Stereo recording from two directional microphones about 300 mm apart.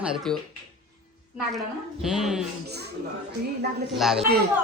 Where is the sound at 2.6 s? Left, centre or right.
Right.